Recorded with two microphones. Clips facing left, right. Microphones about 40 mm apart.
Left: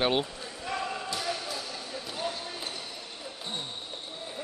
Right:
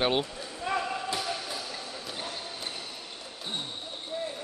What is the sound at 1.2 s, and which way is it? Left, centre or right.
Basketball bounce, centre.